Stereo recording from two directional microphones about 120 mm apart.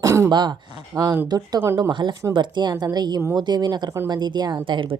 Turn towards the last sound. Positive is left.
turn(degrees=-45)  # may be behind; listen again after turning